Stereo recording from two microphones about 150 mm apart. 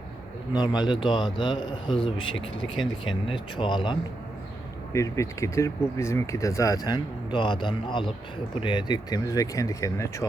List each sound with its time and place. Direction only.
0.5 s speech: 25° left (ahead or behind)
4.9 s speech: 20° left (ahead or behind)